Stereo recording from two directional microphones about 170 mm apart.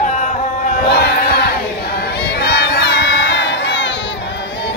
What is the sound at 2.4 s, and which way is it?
Crowd, 75° left (ahead or behind).